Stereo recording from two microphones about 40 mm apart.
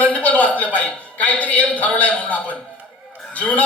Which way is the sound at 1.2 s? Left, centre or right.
Left.